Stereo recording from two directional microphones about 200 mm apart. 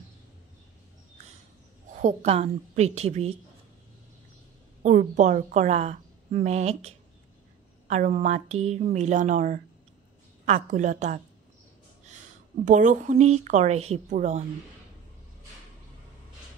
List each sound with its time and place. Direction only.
2.0 s a woman's voice: 35° right (ahead or behind)
4.8 s a woman's voice: 35° right (ahead or behind)
7.9 s a woman's voice: 35° right (ahead or behind)
12.6 s a woman's voice: 40° right (ahead or behind)